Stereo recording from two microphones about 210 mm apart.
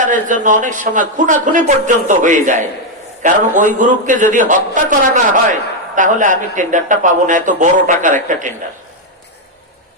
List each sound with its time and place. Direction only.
0.0 s a man's voice: 35° right (ahead or behind)